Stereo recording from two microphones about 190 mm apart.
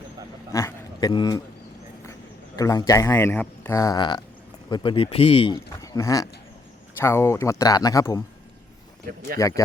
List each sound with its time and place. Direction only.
0.5 s a sound: 20° left (ahead or behind)
2.6 s speech: 20° left (ahead or behind)
9.4 s speech: 15° left (ahead or behind)